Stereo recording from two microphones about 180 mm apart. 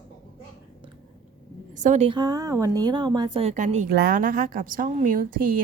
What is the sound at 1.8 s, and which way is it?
Speech, 40° right (ahead or behind).